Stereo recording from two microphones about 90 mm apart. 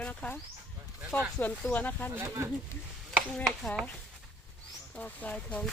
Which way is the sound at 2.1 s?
30° right (ahead or behind).